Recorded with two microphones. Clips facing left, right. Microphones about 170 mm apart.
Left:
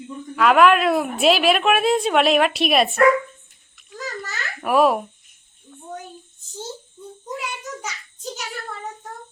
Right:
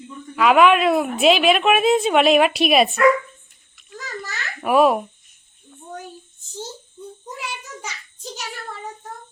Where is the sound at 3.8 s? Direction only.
Centre (ahead or behind).